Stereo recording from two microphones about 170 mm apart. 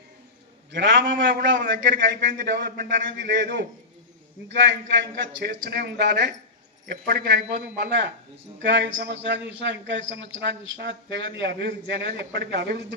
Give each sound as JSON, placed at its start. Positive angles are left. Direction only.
{"t": 0.7, "sound": "a man's voice", "side_deg": -90}
{"t": 5.4, "sound": "speech", "side_deg": -70}
{"t": 6.8, "sound": "a man's voice", "side_deg": -70}